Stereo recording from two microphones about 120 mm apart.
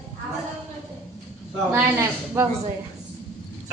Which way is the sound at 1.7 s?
20° right (ahead or behind).